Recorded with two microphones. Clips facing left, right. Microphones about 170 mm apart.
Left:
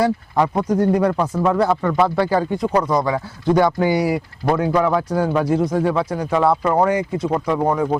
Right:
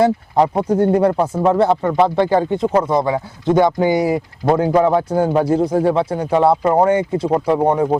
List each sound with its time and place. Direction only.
0.0 s speech: 30° right (ahead or behind)